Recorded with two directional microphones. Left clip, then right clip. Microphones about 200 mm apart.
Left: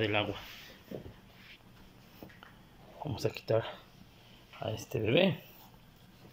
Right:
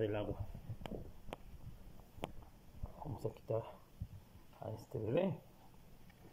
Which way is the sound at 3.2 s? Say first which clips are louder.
Left 10 dB; 20° left (ahead or behind).